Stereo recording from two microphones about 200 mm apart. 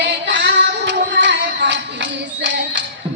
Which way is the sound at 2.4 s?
60° right (ahead or behind).